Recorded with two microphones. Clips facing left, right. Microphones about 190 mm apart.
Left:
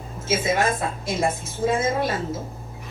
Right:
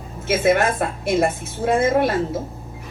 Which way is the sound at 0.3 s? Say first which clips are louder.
Right 5 dB; 65° right (ahead or behind).